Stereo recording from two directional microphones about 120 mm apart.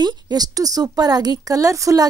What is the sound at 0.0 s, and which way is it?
A woman's voice, 35° right (ahead or behind).